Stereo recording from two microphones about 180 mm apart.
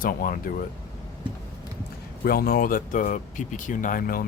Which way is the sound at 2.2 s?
55° left (ahead or behind).